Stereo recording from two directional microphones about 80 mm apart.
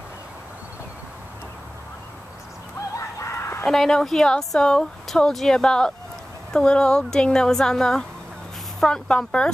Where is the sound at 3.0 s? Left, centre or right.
Left.